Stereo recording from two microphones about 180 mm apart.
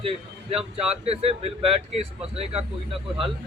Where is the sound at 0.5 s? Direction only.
35° right (ahead or behind).